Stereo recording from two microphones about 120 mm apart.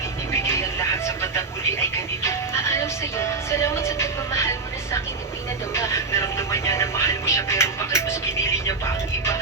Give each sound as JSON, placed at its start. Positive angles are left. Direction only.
{"t": 0.4, "sound": "music", "side_deg": 20}